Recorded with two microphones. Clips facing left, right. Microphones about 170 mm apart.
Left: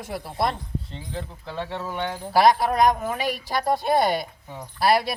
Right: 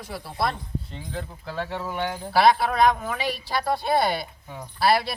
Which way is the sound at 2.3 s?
40° left (ahead or behind).